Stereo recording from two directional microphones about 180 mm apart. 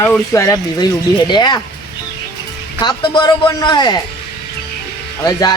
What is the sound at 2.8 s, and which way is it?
Speech, 25° left (ahead or behind).